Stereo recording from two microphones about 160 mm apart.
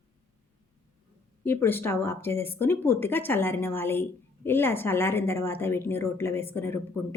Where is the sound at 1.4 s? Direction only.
15° left (ahead or behind).